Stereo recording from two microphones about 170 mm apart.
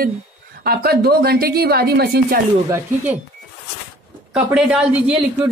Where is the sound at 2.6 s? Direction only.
15° right (ahead or behind).